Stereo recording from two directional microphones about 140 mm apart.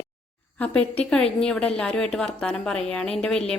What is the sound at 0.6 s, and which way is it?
A woman's voice, 10° left (ahead or behind).